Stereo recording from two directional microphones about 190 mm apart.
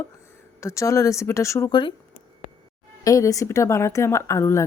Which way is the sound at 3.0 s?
15° left (ahead or behind).